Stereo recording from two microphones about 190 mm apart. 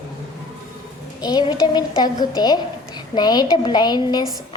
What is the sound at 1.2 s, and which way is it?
A woman's voice, 20° left (ahead or behind).